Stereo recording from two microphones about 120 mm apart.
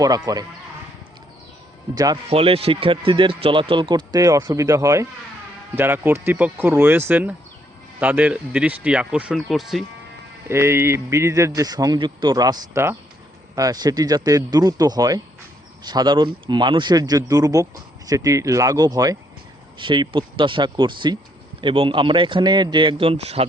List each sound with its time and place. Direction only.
0.3 s a man's voice: 30° right (ahead or behind)
2.3 s speech: 50° right (ahead or behind); by 9.8 s centre (ahead or behind)
10.5 s a man's voice: 20° right (ahead or behind)
12.7 s a man's voice: 20° right (ahead or behind)
13.6 s speech: 30° right (ahead or behind)
19.8 s speech: 40° right (ahead or behind); by 23.5 s 60° right (ahead or behind)